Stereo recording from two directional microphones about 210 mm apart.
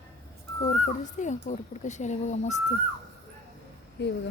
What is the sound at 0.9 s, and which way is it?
Speech, 35° left (ahead or behind).